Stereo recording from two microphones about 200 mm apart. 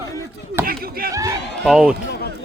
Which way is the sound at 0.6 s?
50° right (ahead or behind).